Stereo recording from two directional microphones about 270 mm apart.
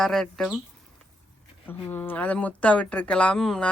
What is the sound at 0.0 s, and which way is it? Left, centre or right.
Speech, centre.